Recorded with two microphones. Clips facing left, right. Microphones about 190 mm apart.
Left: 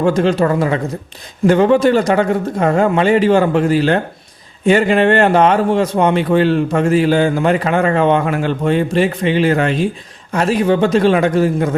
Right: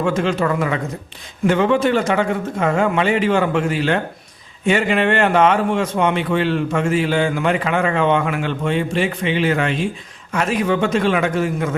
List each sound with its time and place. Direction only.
0.0 s a man's voice: 35° left (ahead or behind)